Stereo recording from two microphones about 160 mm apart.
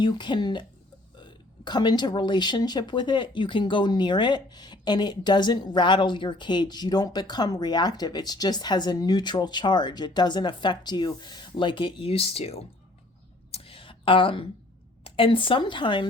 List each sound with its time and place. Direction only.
0.0 s speech: 30° left (ahead or behind)
13.5 s a sound: 35° left (ahead or behind)
15.0 s speech: 35° left (ahead or behind)